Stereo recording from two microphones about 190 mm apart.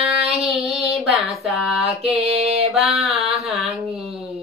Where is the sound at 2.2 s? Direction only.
30° right (ahead or behind).